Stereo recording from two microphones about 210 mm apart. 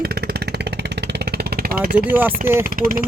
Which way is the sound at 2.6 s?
40° right (ahead or behind).